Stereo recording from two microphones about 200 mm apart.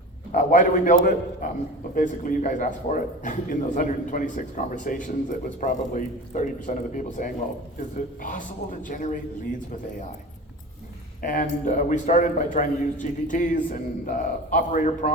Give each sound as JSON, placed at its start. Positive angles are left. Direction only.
{"t": 0.3, "sound": "a man's voice", "side_deg": 40}
{"t": 11.2, "sound": "a man's voice", "side_deg": 45}